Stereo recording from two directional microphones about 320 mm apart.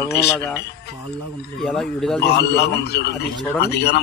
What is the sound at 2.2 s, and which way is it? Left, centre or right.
Speech, left.